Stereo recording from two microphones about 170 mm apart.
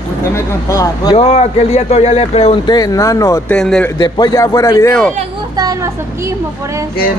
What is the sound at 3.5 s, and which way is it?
Speech, 5° left (ahead or behind).